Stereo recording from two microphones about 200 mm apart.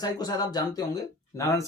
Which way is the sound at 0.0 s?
20° left (ahead or behind).